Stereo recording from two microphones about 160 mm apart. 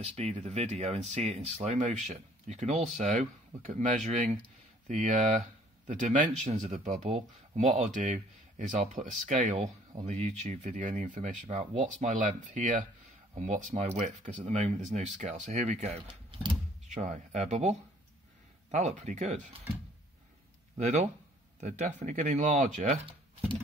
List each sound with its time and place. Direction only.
0.0 s speech: 40° right (ahead or behind)
20.7 s speech: 45° right (ahead or behind)